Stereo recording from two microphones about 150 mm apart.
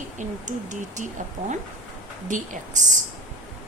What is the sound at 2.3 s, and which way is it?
Speech, 55° right (ahead or behind).